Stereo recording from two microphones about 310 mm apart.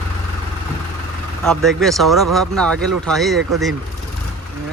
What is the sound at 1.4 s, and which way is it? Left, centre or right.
Speech, centre.